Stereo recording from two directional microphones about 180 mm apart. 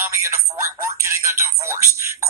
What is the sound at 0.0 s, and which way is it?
Speech, 15° right (ahead or behind).